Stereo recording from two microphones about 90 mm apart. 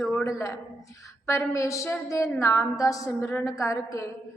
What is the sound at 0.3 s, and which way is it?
A woman's voice, 35° left (ahead or behind).